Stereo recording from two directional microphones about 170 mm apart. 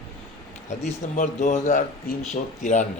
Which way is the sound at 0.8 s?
45° left (ahead or behind).